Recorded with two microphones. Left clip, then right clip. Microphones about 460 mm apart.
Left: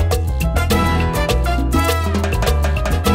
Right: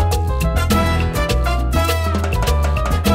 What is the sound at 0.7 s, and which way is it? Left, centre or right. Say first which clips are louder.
Music: left 2 dB; left.